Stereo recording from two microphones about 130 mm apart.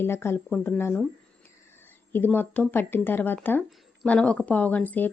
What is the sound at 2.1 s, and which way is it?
A woman's voice, 15° left (ahead or behind).